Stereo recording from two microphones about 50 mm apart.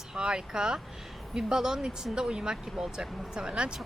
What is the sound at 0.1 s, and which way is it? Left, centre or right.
A woman's voice, centre.